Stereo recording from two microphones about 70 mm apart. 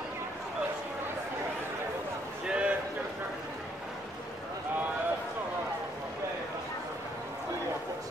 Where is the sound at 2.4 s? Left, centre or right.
Centre.